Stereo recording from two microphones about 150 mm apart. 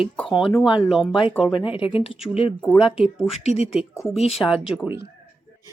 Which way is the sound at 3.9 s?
20° left (ahead or behind).